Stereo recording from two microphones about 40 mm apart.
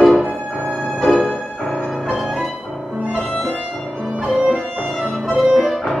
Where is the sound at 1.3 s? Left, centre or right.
Centre.